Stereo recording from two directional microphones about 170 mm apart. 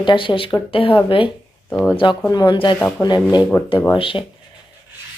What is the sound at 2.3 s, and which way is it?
A woman's voice, 25° left (ahead or behind).